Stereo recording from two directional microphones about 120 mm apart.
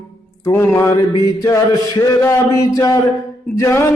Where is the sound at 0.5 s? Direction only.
20° left (ahead or behind).